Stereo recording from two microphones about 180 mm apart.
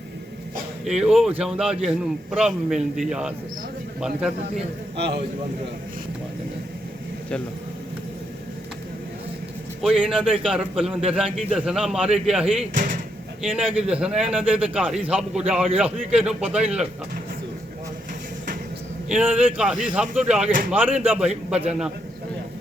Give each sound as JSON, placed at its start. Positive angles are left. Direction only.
{"t": 0.9, "sound": "a man's voice", "side_deg": 0}
{"t": 4.9, "sound": "a man's voice", "side_deg": -65}
{"t": 9.8, "sound": "a man's voice", "side_deg": 0}
{"t": 12.7, "sound": "speech", "side_deg": -50}
{"t": 13.4, "sound": "a man's voice", "side_deg": -5}
{"t": 19.0, "sound": "a man's voice", "side_deg": -5}